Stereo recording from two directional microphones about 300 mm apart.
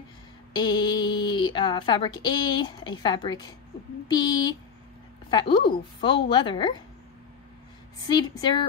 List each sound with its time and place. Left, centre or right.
0.5 s a woman's voice: centre
8.1 s a woman's voice: centre